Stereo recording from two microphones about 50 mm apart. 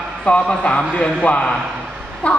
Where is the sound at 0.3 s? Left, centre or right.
Left.